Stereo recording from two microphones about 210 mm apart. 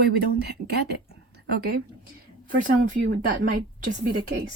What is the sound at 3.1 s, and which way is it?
Speech, 50° right (ahead or behind).